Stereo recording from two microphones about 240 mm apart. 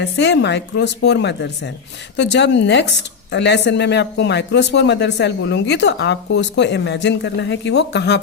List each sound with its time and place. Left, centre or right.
0.0 s speech: left